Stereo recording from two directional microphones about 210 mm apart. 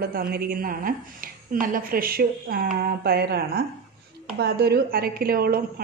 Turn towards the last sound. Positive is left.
turn(degrees=-45)  # may be behind; listen again after turning